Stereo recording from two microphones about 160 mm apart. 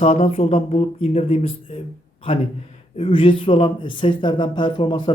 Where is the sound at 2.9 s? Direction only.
35° left (ahead or behind).